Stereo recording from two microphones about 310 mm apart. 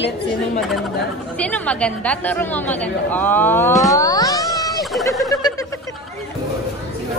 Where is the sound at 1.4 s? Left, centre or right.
Centre.